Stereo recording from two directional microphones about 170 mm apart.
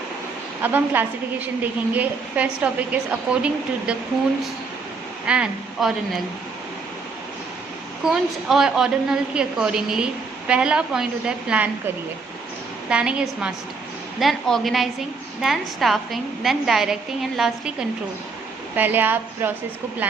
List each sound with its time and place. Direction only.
0.6 s a woman's voice: 10° right (ahead or behind)
5.2 s speech: 5° right (ahead or behind)
8.0 s a woman's voice: 5° right (ahead or behind)
12.9 s a woman's voice: 5° right (ahead or behind)